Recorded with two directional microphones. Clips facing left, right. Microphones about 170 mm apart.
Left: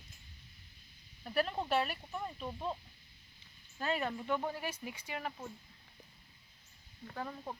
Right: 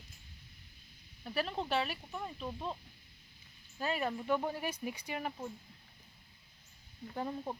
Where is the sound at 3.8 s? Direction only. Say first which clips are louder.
Right 1 dB; 10° right (ahead or behind).